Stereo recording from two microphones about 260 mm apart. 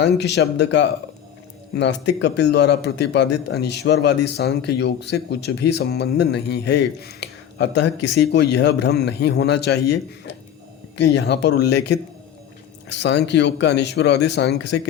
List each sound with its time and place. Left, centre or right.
0.0 s a man's voice: left